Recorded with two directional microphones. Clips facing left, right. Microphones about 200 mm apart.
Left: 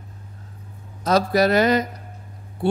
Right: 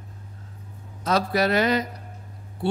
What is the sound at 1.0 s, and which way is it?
Speech, 40° left (ahead or behind).